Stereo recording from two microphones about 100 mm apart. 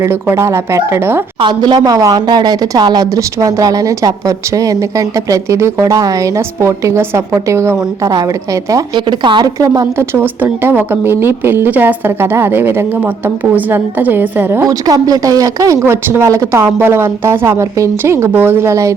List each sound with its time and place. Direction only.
0.0 s a woman's voice: 25° right (ahead or behind)
1.4 s a woman's voice: 45° right (ahead or behind)
9.0 s speech: 50° right (ahead or behind)
9.6 s a woman's voice: 35° right (ahead or behind)
14.6 s a woman's voice: 40° right (ahead or behind)